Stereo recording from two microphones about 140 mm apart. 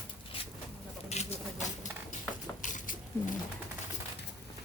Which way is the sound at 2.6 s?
65° left (ahead or behind).